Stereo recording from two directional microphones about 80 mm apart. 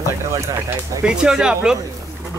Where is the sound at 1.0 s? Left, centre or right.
Centre.